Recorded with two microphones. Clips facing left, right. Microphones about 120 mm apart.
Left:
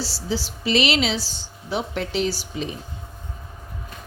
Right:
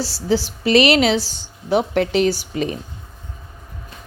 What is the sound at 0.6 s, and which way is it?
A woman's voice, 55° right (ahead or behind).